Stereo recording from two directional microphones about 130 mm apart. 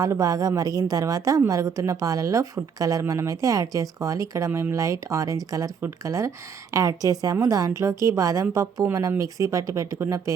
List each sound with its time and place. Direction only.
0.0 s a woman's voice: 25° right (ahead or behind)